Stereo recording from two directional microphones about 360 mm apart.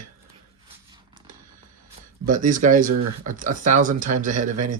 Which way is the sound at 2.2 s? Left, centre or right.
Right.